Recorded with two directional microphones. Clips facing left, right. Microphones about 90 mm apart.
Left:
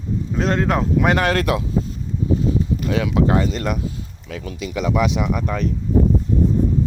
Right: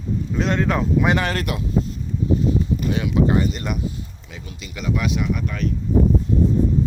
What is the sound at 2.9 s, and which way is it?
Speech, 90° left.